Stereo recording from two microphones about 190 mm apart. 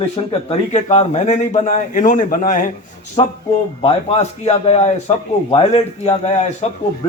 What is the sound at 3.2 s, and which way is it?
A man's voice, 30° left (ahead or behind).